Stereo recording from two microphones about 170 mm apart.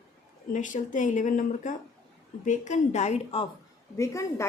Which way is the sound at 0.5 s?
50° left (ahead or behind).